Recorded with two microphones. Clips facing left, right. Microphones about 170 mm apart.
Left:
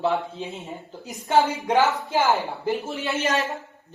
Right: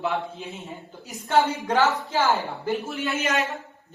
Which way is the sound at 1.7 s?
15° left (ahead or behind).